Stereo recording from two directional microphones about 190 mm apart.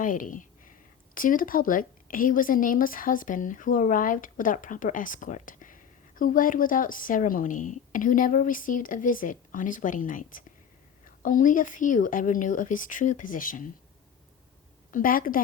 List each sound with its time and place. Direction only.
0.0 s speech: 45° left (ahead or behind)
14.8 s a woman's voice: 45° left (ahead or behind)